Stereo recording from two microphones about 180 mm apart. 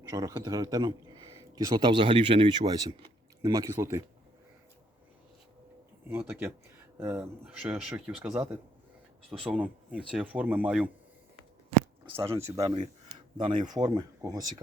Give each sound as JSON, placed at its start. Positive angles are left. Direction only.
{"t": 0.1, "sound": "a man's voice", "side_deg": -20}
{"t": 6.1, "sound": "speech", "side_deg": -10}
{"t": 9.4, "sound": "speech", "side_deg": -5}
{"t": 12.1, "sound": "speech", "side_deg": -15}
{"t": 13.3, "sound": "a man's voice", "side_deg": -25}